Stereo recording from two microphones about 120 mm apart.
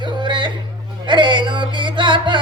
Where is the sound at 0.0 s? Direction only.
40° right (ahead or behind).